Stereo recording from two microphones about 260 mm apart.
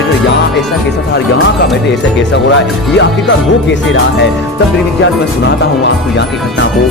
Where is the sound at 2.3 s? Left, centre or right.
Left.